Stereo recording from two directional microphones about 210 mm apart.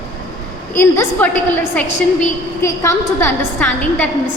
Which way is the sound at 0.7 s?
10° left (ahead or behind).